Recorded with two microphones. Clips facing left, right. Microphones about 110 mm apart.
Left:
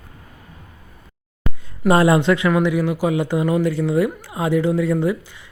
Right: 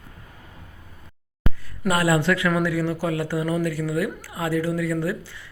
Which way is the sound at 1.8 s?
25° left (ahead or behind).